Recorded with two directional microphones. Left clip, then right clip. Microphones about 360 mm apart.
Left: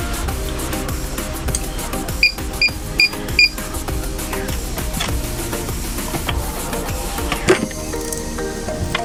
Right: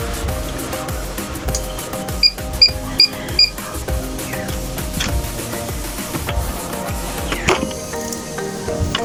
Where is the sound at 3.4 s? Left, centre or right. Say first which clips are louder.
Left 1 dB; centre.